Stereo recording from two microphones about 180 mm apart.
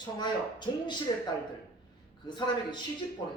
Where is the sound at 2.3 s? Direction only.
25° left (ahead or behind).